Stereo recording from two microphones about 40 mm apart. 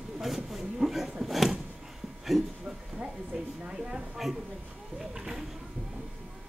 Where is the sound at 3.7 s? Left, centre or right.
Right.